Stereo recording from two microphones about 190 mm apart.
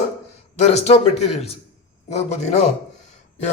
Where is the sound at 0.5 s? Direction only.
35° left (ahead or behind).